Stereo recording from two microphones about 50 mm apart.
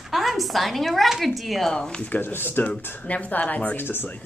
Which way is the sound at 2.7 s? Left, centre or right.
Left.